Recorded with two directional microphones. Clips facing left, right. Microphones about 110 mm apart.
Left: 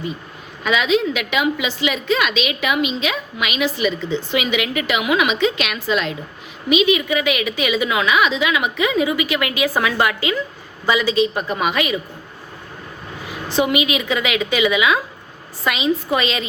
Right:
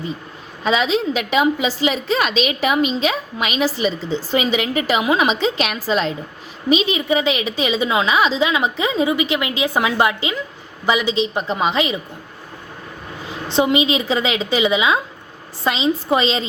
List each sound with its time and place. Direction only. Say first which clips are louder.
0.6 s a woman's voice: even; 35° right (ahead or behind)
13.2 s a woman's voice: right 2 dB; 25° right (ahead or behind)